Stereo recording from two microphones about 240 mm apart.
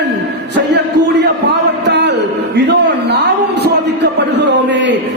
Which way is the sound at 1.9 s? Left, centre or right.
Right.